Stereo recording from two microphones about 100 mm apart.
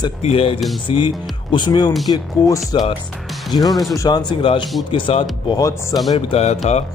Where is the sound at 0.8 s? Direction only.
60° left (ahead or behind).